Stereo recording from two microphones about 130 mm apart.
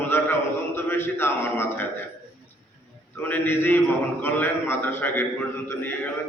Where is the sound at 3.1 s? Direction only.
15° left (ahead or behind).